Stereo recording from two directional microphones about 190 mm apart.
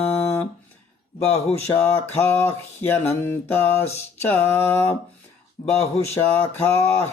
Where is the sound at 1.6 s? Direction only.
15° left (ahead or behind).